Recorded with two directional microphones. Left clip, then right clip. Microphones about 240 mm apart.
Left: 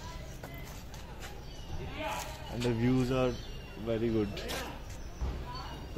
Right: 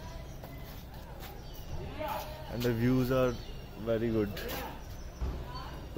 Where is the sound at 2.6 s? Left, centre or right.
Centre.